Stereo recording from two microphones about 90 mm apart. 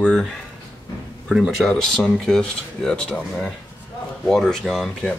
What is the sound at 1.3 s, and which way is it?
Speech, 5° right (ahead or behind).